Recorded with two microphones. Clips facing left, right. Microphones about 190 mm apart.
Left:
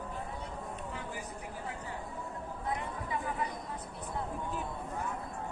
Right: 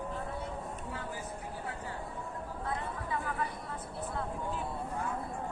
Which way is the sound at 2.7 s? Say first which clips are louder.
Left 1 dB; 20° left (ahead or behind).